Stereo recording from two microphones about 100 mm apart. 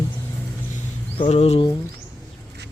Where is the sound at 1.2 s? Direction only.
90° left.